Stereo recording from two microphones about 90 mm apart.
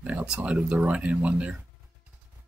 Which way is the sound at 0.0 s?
10° right (ahead or behind).